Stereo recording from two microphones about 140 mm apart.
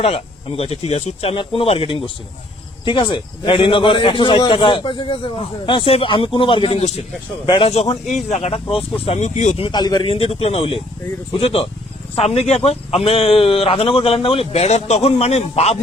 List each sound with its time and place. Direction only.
0.0 s a man's voice: 45° left (ahead or behind)
7.4 s a man's voice: 35° left (ahead or behind)
8.3 s a man's voice: 50° left (ahead or behind)
9.6 s a man's voice: 30° left (ahead or behind)
10.1 s a man's voice: 45° left (ahead or behind)